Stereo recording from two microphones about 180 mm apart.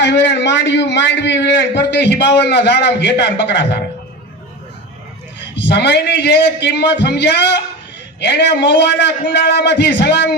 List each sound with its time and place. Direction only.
0.0 s a man's voice: 75° left (ahead or behind)
5.5 s a man's voice: 70° left (ahead or behind)